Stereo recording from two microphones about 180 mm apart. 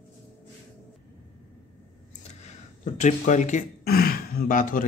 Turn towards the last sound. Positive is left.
turn(degrees=45)  # may be behind; listen again after turning